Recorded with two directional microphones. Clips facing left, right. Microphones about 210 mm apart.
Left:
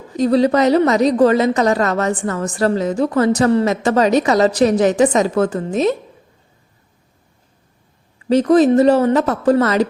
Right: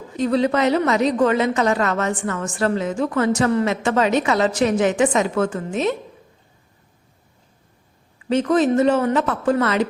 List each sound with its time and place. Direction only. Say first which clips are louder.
0.2 s a woman's voice: left 5 dB; 35° left (ahead or behind)
8.3 s a woman's voice: left 6 dB; 35° left (ahead or behind)